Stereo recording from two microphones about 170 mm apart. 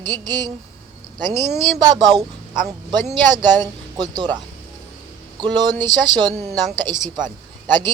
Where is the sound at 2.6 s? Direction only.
50° right (ahead or behind).